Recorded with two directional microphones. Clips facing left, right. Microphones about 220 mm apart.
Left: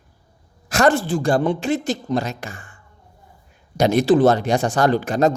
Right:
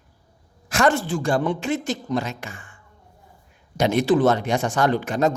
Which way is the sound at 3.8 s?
40° left (ahead or behind).